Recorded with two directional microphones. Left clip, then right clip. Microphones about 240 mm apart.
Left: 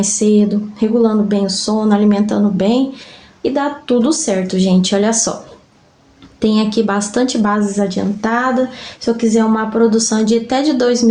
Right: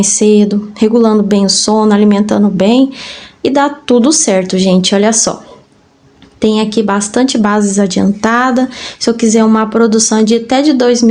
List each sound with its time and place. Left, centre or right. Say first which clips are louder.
0.0 s speech: right 5 dB; right
6.4 s speech: right 4 dB; right